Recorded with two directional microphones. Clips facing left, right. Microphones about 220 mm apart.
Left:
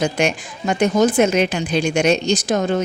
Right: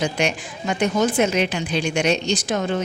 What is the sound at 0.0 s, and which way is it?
A woman's voice, 45° left (ahead or behind).